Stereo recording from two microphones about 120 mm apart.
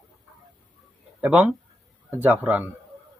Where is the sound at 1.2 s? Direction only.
10° right (ahead or behind).